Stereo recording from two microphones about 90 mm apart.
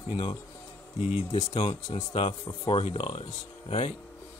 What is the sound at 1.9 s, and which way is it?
Speech, 90° left.